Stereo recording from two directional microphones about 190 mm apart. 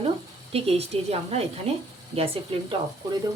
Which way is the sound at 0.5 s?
30° right (ahead or behind).